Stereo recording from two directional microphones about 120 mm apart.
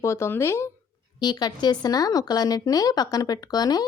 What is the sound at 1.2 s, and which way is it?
Speech, 35° left (ahead or behind).